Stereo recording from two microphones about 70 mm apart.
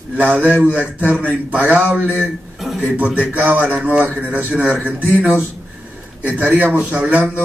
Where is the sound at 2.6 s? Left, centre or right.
Centre.